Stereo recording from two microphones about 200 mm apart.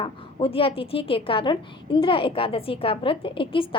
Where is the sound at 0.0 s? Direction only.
25° left (ahead or behind).